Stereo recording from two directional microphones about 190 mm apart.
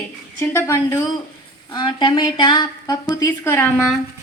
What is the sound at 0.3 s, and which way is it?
A woman's voice, 15° left (ahead or behind).